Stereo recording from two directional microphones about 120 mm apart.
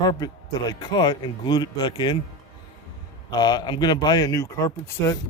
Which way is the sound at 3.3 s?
35° left (ahead or behind).